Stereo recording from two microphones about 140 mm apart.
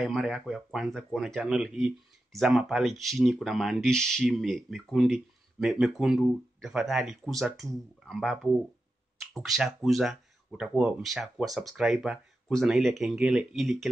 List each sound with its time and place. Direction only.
0.0 s speech: centre (ahead or behind)